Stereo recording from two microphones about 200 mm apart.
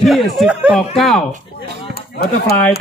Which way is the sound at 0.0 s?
Centre (ahead or behind).